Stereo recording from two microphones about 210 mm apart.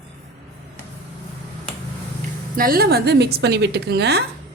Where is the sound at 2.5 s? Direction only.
45° right (ahead or behind).